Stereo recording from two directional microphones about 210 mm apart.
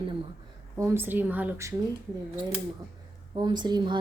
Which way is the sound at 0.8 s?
10° right (ahead or behind).